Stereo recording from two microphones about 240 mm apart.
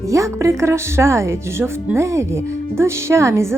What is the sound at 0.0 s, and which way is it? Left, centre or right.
Speech, centre.